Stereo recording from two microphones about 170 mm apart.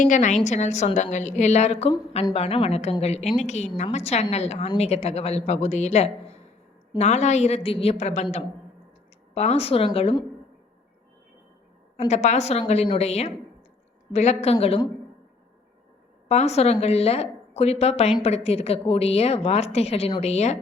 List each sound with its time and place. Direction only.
0.0 s a woman's voice: 45° left (ahead or behind)
11.9 s a woman's voice: 40° left (ahead or behind)
16.3 s a woman's voice: 40° left (ahead or behind)